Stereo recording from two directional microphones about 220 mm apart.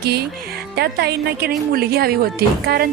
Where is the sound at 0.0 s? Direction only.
45° right (ahead or behind).